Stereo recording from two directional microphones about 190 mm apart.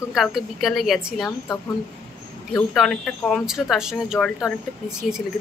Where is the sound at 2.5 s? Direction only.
5° left (ahead or behind).